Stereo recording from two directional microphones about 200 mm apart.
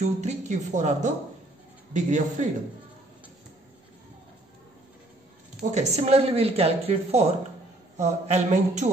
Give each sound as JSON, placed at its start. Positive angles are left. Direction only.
{"t": 0.0, "sound": "speech", "side_deg": -35}
{"t": 5.6, "sound": "speech", "side_deg": -35}